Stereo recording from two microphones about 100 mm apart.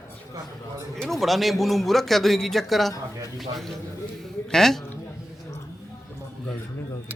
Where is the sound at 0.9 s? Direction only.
Centre (ahead or behind).